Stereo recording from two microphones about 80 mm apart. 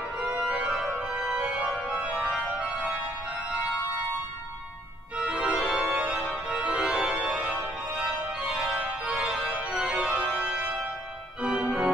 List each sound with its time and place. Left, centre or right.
0.2 s organ: centre
5.2 s organ: centre